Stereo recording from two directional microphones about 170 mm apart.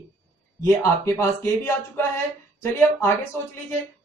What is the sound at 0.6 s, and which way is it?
Speech, 15° left (ahead or behind).